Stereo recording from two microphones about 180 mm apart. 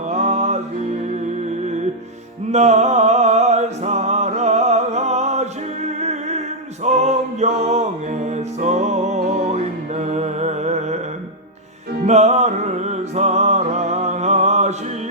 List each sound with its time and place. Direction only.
0.1 s music: 40° right (ahead or behind)
2.5 s music: 40° right (ahead or behind)
12.0 s music: 40° right (ahead or behind)